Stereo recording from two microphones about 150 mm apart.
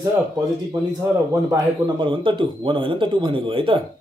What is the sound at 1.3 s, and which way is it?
Speech, 25° right (ahead or behind).